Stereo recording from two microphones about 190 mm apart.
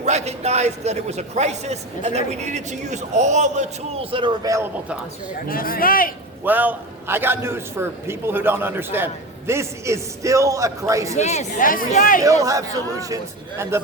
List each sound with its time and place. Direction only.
0.0 s a man's voice: 35° right (ahead or behind)
4.1 s speech: 25° right (ahead or behind)
5.5 s speech: 50° left (ahead or behind)
6.4 s a man's voice: 10° right (ahead or behind)
11.2 s speech: 35° left (ahead or behind)
12.2 s a man's voice: 15° right (ahead or behind)